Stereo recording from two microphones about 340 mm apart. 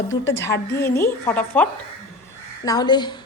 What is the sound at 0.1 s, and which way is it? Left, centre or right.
A woman's voice, centre.